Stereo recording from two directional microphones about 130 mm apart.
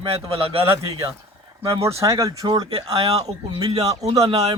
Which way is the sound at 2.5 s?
45° right (ahead or behind).